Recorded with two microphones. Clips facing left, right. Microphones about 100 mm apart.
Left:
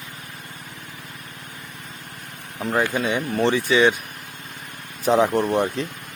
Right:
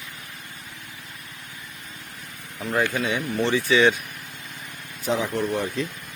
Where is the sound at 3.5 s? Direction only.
20° left (ahead or behind).